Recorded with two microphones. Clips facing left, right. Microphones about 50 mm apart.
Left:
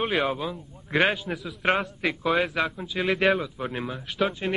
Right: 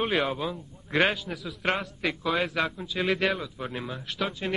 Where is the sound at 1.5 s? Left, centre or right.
Centre.